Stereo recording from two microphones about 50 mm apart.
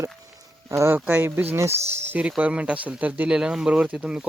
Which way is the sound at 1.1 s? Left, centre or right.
Right.